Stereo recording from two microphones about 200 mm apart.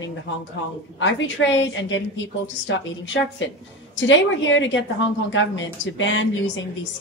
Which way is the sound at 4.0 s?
70° left (ahead or behind).